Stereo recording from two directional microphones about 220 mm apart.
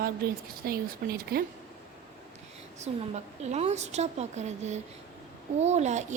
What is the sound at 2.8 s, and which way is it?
A woman's voice, 30° right (ahead or behind).